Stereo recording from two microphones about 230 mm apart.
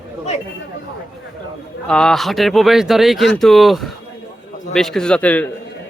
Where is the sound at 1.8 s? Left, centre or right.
Centre.